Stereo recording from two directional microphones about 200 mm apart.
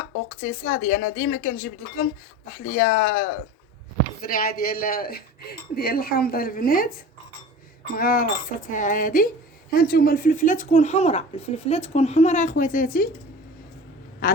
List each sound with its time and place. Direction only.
0.3 s speech: 40° left (ahead or behind)
2.6 s speech: 45° left (ahead or behind)
7.9 s speech: 45° left (ahead or behind)
14.2 s quack: 45° left (ahead or behind)